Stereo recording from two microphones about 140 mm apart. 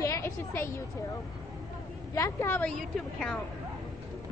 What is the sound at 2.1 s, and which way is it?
Speech, 20° left (ahead or behind).